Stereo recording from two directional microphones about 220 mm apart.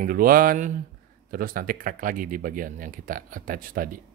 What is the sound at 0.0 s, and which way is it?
Speech, 40° right (ahead or behind).